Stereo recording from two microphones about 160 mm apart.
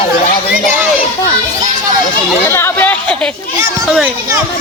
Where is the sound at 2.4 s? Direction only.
15° left (ahead or behind).